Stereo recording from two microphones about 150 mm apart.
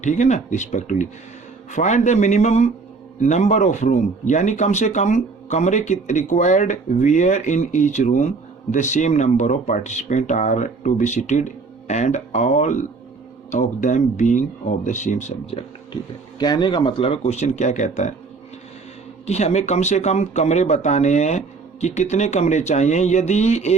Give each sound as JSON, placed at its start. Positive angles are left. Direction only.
{"t": 0.0, "sound": "speech", "side_deg": 55}
{"t": 16.4, "sound": "speech", "side_deg": 30}
{"t": 19.2, "sound": "speech", "side_deg": 45}